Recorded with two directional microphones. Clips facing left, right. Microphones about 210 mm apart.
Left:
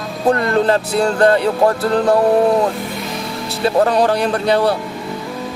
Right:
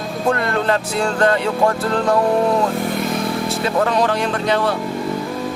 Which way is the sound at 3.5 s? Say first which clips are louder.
Left 6 dB; 35° left (ahead or behind).